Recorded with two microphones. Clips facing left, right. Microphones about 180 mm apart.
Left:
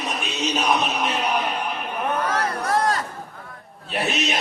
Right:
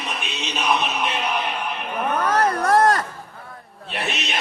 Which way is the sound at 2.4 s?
50° right (ahead or behind).